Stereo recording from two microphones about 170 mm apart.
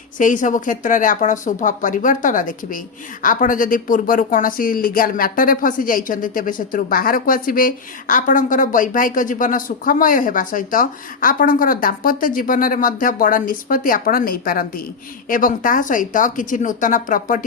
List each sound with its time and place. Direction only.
0.2 s speech: 50° left (ahead or behind)